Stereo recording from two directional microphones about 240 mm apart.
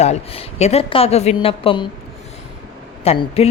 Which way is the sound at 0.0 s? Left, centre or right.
Left.